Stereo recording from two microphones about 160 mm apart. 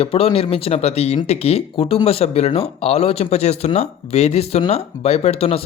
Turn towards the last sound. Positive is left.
turn(degrees=40)  # may be behind; listen again after turning